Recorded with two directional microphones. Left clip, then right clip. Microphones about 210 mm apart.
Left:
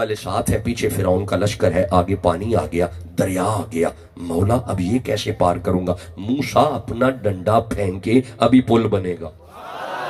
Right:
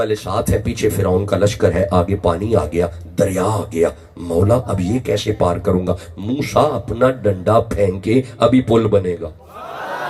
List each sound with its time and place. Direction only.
0.0 s speech: 25° left (ahead or behind)